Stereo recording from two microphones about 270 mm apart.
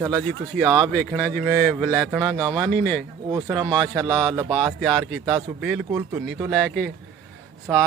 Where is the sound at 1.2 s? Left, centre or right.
Centre.